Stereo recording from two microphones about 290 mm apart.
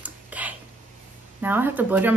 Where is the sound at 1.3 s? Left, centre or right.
Centre.